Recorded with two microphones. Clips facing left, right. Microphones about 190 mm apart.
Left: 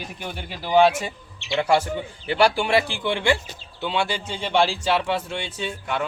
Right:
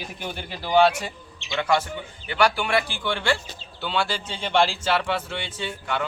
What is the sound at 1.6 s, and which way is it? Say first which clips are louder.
A man's voice: left 3 dB; 30° left (ahead or behind).